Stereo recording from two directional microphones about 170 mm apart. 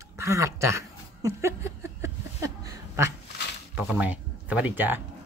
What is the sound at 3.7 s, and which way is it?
Speech, 10° right (ahead or behind).